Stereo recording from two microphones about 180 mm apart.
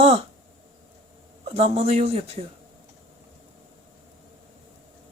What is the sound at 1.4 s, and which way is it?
A man's voice, 35° right (ahead or behind).